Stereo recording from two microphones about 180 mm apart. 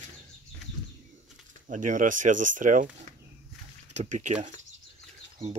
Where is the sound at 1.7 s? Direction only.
45° right (ahead or behind).